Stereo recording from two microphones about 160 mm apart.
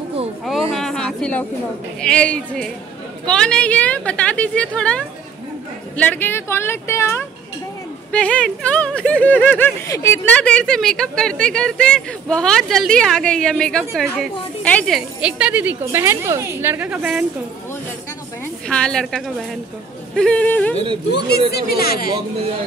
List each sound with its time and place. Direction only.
0.5 s a sound: centre (ahead or behind)
2.0 s a woman's voice: 5° left (ahead or behind)
18.7 s a woman's voice: 5° left (ahead or behind)
21.5 s speech: 75° left (ahead or behind)